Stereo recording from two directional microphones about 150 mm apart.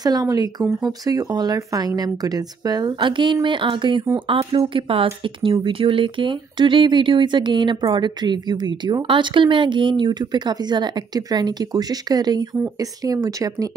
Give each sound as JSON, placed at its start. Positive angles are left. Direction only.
{"t": 0.0, "sound": "speech", "side_deg": -25}